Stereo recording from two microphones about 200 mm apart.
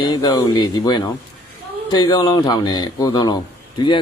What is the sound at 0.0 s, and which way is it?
A man's voice, 20° left (ahead or behind).